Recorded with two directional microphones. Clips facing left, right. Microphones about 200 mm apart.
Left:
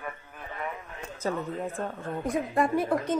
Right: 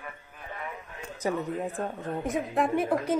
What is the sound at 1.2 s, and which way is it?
Speech, 15° right (ahead or behind).